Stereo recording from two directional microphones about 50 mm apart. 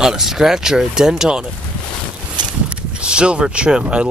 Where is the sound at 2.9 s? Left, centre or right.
Centre.